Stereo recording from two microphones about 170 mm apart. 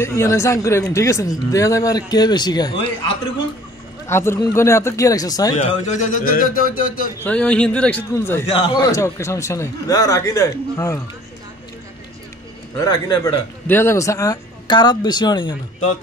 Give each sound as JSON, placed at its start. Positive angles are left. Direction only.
{"t": 0.0, "sound": "a man's voice", "side_deg": 15}
{"t": 4.1, "sound": "a man's voice", "side_deg": 15}
{"t": 5.6, "sound": "speech", "side_deg": 50}
{"t": 7.2, "sound": "a man's voice", "side_deg": 5}
{"t": 8.5, "sound": "a man's voice", "side_deg": 25}
{"t": 12.7, "sound": "a man's voice", "side_deg": 20}